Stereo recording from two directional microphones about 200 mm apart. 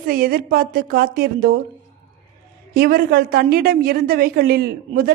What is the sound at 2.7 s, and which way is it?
A woman's voice, 50° right (ahead or behind).